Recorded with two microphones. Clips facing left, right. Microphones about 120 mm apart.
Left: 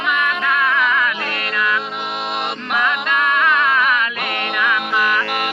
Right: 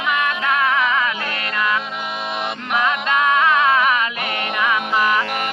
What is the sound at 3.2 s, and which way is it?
Music, 25° right (ahead or behind).